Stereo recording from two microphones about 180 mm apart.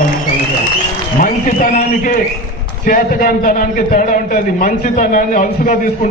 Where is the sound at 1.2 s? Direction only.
45° left (ahead or behind).